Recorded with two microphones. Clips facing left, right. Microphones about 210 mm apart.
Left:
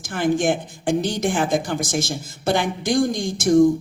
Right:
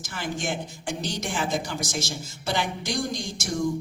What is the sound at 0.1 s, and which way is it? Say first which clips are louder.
Speech: left 11 dB; 55° left (ahead or behind).